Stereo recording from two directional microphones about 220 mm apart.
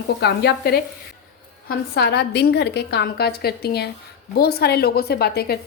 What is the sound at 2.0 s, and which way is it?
Speech, 50° left (ahead or behind).